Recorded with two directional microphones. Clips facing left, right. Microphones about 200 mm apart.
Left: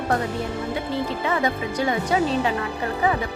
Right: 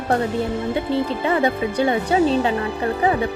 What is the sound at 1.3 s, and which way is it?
Speech, 30° right (ahead or behind).